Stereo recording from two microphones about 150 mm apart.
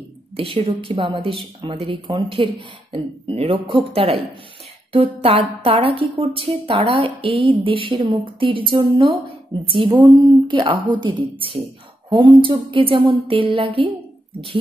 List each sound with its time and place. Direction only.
0.4 s a woman's voice: 35° right (ahead or behind)